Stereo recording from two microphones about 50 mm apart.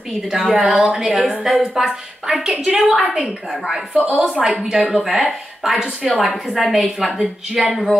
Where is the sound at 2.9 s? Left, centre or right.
Centre.